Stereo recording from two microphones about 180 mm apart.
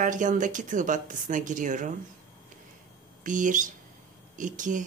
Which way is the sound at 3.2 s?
45° right (ahead or behind).